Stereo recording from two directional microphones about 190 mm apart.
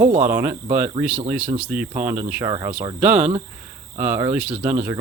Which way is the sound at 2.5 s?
25° right (ahead or behind).